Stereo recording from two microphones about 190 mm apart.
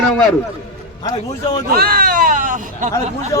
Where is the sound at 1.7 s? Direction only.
50° right (ahead or behind).